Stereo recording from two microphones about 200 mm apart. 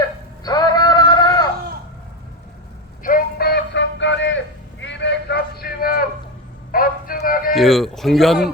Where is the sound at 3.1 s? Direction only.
50° left (ahead or behind).